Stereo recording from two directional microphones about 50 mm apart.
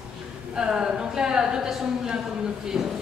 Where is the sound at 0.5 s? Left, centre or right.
Centre.